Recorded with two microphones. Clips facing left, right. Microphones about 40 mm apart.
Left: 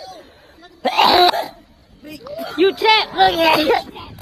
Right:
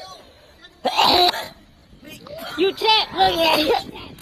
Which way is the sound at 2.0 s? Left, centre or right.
Right.